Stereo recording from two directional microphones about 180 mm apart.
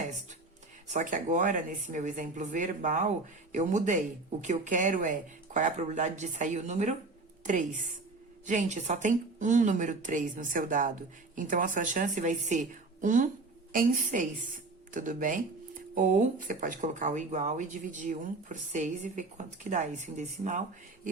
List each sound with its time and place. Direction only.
0.9 s a woman's voice: 45° right (ahead or behind)